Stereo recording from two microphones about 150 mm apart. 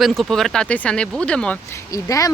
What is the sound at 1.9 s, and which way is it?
Speech, 20° left (ahead or behind).